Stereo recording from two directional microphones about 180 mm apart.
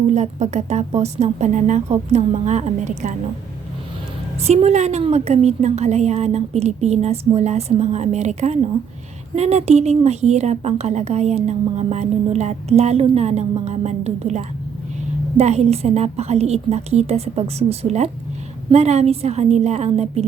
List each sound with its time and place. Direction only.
0.1 s a woman's voice: 40° right (ahead or behind)
4.4 s a woman's voice: 35° right (ahead or behind)